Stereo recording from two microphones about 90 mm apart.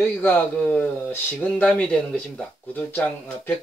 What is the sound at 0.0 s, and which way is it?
Speech, 20° left (ahead or behind).